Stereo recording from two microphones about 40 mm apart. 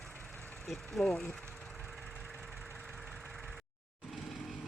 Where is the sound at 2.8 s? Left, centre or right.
Centre.